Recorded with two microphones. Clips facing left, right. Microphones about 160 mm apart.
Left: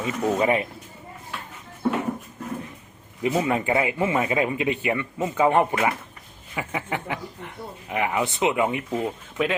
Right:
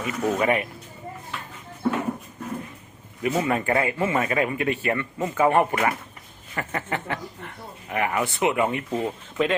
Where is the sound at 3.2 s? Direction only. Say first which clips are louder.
Left 1 dB; 15° left (ahead or behind).